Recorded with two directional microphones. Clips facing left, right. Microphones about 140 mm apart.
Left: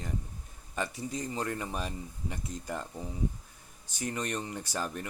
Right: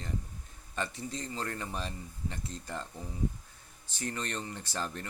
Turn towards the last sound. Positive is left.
turn(degrees=10)  # may be behind; listen again after turning